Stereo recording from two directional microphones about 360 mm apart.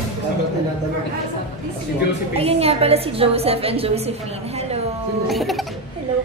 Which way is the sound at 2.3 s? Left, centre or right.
Centre.